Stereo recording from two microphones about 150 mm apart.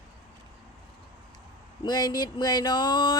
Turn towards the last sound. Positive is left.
turn(degrees=30)  # may be behind; listen again after turning